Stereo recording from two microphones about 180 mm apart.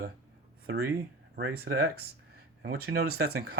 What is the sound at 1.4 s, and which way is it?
Speech, 65° right (ahead or behind).